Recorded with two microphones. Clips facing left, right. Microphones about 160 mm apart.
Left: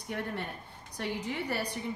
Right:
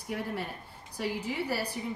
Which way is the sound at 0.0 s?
5° right (ahead or behind).